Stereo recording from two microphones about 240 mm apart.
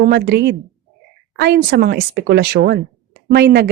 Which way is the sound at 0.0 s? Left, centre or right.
Right.